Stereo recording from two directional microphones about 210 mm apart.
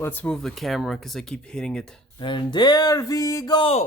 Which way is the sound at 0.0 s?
10° left (ahead or behind).